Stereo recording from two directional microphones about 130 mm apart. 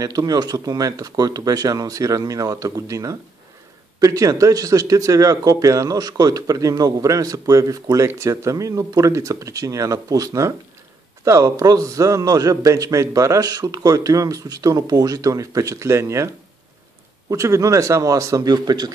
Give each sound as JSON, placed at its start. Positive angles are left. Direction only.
{"t": 0.0, "sound": "speech", "side_deg": -30}
{"t": 17.3, "sound": "speech", "side_deg": -25}